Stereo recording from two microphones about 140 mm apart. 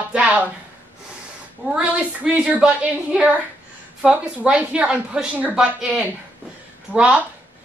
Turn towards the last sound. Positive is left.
turn(degrees=-5)  # may be behind; listen again after turning